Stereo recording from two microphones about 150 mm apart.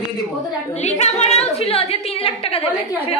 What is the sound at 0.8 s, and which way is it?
A woman's voice, 50° left (ahead or behind).